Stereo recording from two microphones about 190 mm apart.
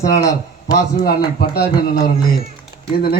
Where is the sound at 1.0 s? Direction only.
55° left (ahead or behind).